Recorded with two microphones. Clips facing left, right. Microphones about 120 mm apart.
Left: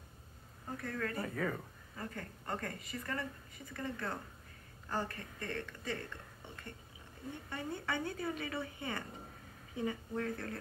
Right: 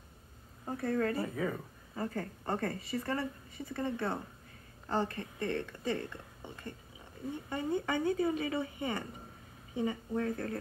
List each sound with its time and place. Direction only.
0.7 s speech: 30° right (ahead or behind)
1.2 s speech: 10° right (ahead or behind)
2.0 s a woman's voice: 30° right (ahead or behind)
7.4 s speech: 15° right (ahead or behind)